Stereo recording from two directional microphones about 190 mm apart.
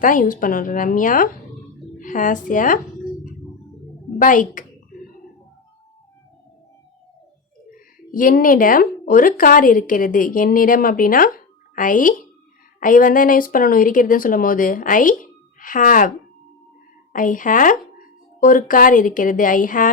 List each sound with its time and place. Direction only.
0.0 s speech: 45° left (ahead or behind)
4.2 s a sound: 45° left (ahead or behind)
7.7 s speech: 45° left (ahead or behind)